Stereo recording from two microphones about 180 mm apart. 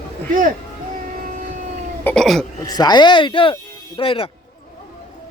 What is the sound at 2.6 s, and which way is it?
Speech, 20° left (ahead or behind).